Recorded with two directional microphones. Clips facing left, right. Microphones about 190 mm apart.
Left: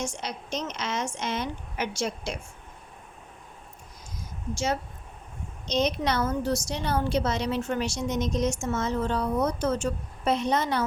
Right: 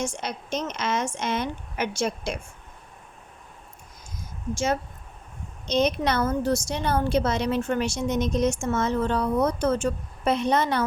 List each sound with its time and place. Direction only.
0.0 s a woman's voice: 55° right (ahead or behind)
4.5 s a woman's voice: 50° right (ahead or behind)